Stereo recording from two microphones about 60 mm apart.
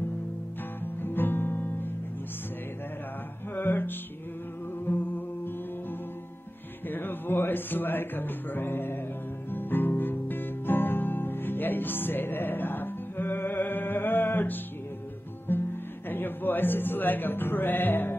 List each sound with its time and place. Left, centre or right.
1.0 s music: left
3.5 s music: left